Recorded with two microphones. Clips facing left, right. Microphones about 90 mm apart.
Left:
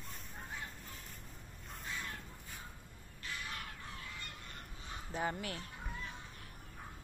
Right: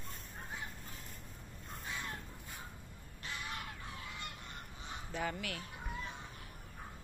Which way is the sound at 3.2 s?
25° right (ahead or behind).